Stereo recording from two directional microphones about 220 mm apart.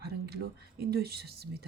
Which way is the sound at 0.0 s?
45° right (ahead or behind).